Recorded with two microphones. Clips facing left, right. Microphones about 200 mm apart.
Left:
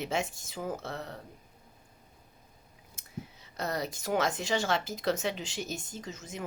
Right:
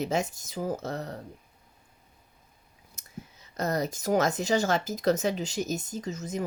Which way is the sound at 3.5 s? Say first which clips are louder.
Right 5 dB; 45° right (ahead or behind).